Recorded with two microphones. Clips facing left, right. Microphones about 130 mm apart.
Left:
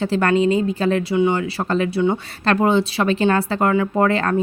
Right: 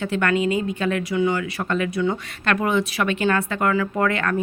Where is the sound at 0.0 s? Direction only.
30° left (ahead or behind).